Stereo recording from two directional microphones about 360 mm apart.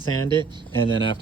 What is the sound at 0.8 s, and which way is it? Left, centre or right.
Speech, centre.